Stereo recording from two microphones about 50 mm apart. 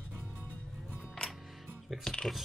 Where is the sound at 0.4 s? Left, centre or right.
Left.